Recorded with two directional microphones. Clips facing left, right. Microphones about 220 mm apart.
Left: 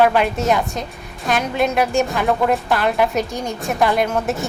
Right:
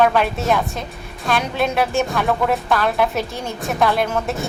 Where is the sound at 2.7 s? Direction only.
10° left (ahead or behind).